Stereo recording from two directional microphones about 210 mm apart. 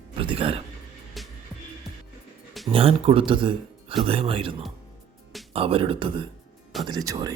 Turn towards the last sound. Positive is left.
turn(degrees=-15)  # may be behind; listen again after turning